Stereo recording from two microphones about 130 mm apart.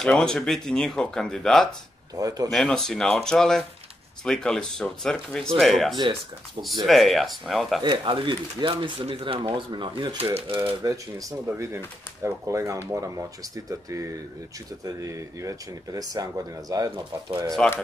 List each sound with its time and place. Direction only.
0.0 s speech: 5° left (ahead or behind)
2.1 s speech: 25° right (ahead or behind)
2.5 s speech: 5° left (ahead or behind)
7.8 s speech: 40° right (ahead or behind)
10.8 s speech: 25° right (ahead or behind)
17.6 s speech: 5° left (ahead or behind)